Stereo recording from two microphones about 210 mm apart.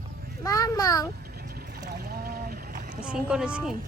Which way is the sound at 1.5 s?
45° right (ahead or behind).